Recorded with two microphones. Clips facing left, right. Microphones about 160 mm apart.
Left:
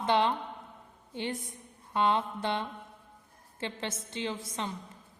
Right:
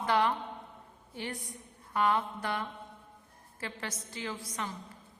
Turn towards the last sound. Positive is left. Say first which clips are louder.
# left 3 dB
turn(degrees=25)  # may be behind; listen again after turning